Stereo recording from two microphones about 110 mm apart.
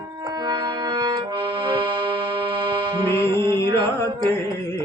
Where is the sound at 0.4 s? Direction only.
40° right (ahead or behind).